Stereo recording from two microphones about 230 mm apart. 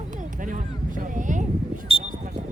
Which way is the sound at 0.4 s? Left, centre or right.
Right.